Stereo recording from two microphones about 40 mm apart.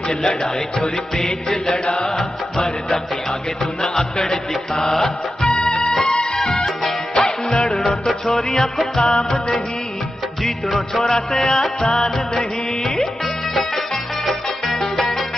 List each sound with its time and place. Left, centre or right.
0.2 s music: centre
9.0 s music: left
10.4 s music: centre
11.8 s music: centre
14.2 s music: centre